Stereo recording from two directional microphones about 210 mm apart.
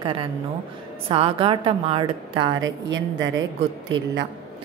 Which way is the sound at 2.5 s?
65° right (ahead or behind).